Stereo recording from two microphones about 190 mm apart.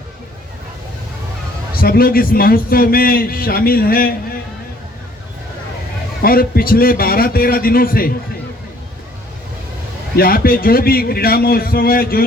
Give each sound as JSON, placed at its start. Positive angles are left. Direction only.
{"t": 1.7, "sound": "a man's voice", "side_deg": 50}
{"t": 6.2, "sound": "a man's voice", "side_deg": 50}
{"t": 10.2, "sound": "a man's voice", "side_deg": 50}